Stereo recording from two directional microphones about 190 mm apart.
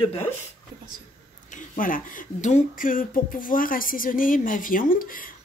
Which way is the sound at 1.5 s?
45° left (ahead or behind).